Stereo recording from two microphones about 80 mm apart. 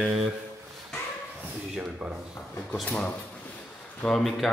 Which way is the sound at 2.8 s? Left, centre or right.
Centre.